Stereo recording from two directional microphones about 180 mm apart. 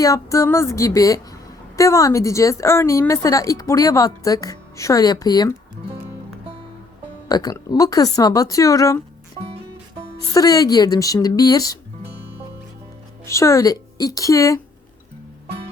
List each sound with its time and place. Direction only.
0.0 s a woman's voice: 20° left (ahead or behind)
7.3 s a woman's voice: 20° left (ahead or behind)
10.3 s a woman's voice: 20° left (ahead or behind)
13.2 s a woman's voice: 15° left (ahead or behind)